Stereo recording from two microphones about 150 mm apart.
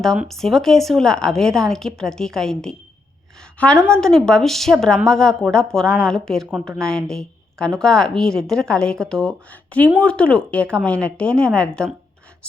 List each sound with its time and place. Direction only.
0.3 s a woman's voice: centre (ahead or behind)